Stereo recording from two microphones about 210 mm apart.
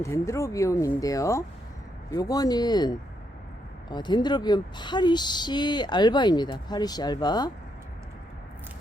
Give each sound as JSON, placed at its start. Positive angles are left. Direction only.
{"t": 0.0, "sound": "speech", "side_deg": 15}